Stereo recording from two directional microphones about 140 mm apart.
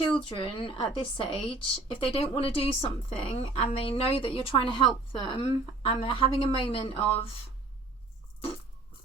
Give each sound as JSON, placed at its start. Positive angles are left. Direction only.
{"t": 0.2, "sound": "speech", "side_deg": 40}